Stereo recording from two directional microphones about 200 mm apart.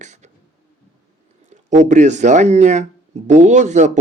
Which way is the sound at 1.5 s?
35° right (ahead or behind).